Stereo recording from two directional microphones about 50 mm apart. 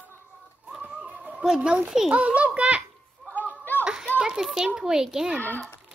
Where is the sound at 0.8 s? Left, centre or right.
Right.